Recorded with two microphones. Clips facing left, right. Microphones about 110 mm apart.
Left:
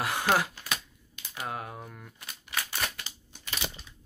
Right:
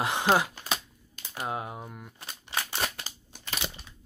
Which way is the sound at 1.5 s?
20° right (ahead or behind).